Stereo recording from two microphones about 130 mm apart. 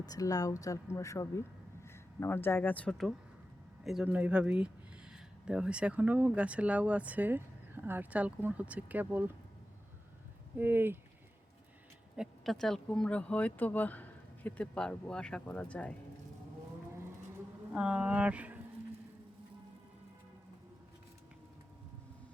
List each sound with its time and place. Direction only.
0.0 s speech: 30° left (ahead or behind); by 3.1 s 10° left (ahead or behind)
4.0 s speech: 10° right (ahead or behind)
10.6 s speech: 15° right (ahead or behind)
12.1 s speech: centre (ahead or behind)
17.7 s speech: 10° right (ahead or behind)